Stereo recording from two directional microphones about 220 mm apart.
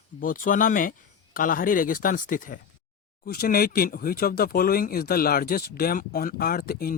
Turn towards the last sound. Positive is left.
turn(degrees=45)  # may be behind; listen again after turning